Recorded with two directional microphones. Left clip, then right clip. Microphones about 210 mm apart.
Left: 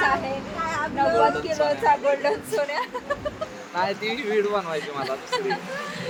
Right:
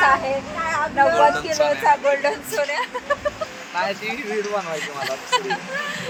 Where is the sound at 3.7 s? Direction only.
55° left (ahead or behind).